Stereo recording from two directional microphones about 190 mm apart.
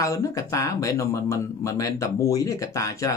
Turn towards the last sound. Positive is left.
turn(degrees=15)  # may be behind; listen again after turning